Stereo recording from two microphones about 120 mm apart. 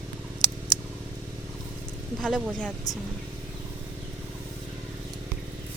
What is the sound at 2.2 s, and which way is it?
Speech, 5° left (ahead or behind).